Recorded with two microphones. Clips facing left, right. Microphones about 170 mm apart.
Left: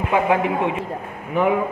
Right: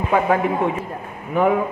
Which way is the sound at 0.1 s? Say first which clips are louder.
Right 1 dB; 45° right (ahead or behind).